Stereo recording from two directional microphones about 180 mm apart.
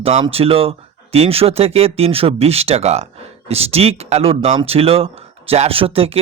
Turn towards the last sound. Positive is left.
turn(degrees=-30)  # may be behind; listen again after turning